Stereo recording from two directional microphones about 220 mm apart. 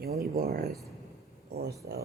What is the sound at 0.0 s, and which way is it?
Speech, 45° right (ahead or behind).